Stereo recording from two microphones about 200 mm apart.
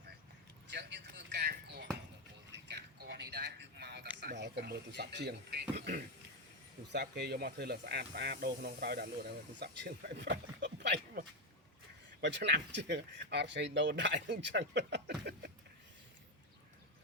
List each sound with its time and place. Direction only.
0.7 s basketball bounce: 60° right (ahead or behind)
2.5 s a sound: 60° right (ahead or behind)
6.9 s speech: 55° right (ahead or behind)
12.2 s speech: 60° right (ahead or behind)